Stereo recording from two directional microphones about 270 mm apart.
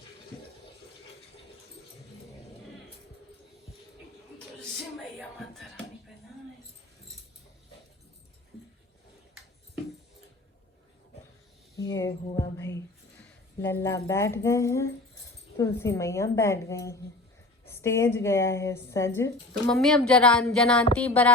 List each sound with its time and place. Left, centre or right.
5.5 s music: centre
11.8 s music: centre
13.6 s a woman's voice: centre